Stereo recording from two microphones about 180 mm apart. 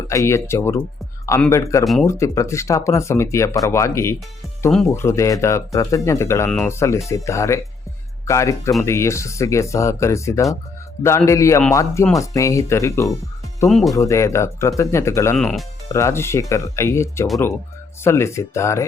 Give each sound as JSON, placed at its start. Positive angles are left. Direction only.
{"t": 0.1, "sound": "speech", "side_deg": 15}
{"t": 1.8, "sound": "speech", "side_deg": 0}
{"t": 2.0, "sound": "speech", "side_deg": 15}
{"t": 13.7, "sound": "speech", "side_deg": 0}
{"t": 13.9, "sound": "speech", "side_deg": 15}
{"t": 15.4, "sound": "speech", "side_deg": 5}
{"t": 15.9, "sound": "speech", "side_deg": 15}